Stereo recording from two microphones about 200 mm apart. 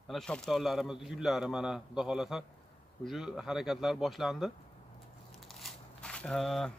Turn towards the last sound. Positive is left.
turn(degrees=0)  # may be behind; listen again after turning